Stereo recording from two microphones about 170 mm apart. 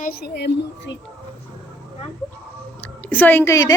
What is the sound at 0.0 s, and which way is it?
Speech, 65° left (ahead or behind).